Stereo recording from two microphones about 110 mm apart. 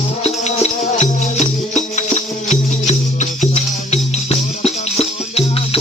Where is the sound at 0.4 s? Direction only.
85° left.